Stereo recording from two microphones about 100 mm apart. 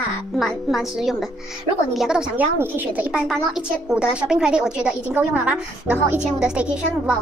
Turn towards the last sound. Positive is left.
turn(degrees=-10)  # may be behind; listen again after turning